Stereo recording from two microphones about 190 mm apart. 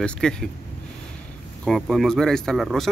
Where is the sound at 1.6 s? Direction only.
Centre (ahead or behind).